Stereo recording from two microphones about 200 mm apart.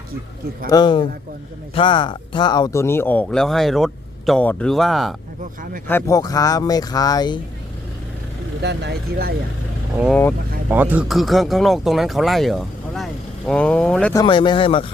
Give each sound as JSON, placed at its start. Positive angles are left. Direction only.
{"t": 0.7, "sound": "speech", "side_deg": 20}
{"t": 5.9, "sound": "speech", "side_deg": 15}
{"t": 8.6, "sound": "speech", "side_deg": -55}
{"t": 10.7, "sound": "speech", "side_deg": -10}
{"t": 14.1, "sound": "speech", "side_deg": 20}